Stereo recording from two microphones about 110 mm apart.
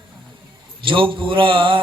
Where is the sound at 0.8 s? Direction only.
50° right (ahead or behind).